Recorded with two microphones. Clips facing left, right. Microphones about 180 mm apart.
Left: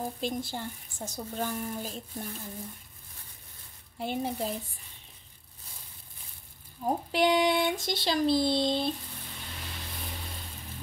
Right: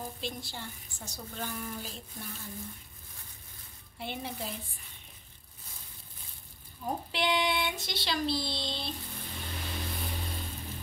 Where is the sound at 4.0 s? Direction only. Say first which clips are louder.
Left 7 dB; 40° left (ahead or behind).